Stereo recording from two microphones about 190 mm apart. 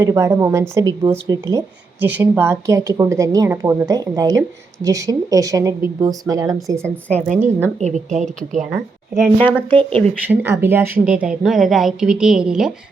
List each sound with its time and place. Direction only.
0.0 s a woman's voice: 15° right (ahead or behind)
7.1 s speech: 35° right (ahead or behind)
9.2 s speech: 10° left (ahead or behind)
10.2 s a woman's voice: 10° right (ahead or behind)